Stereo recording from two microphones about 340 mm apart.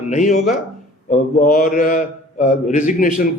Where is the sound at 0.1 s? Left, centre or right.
Left.